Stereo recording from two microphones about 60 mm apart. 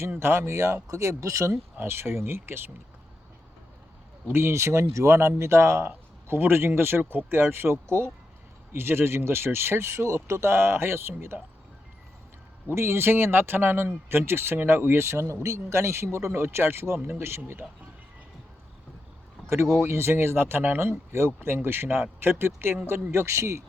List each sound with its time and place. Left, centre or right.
0.2 s speech: right
1.8 s speech: right
4.3 s speech: right
5.9 s a man's voice: right
12.7 s speech: right
19.5 s speech: right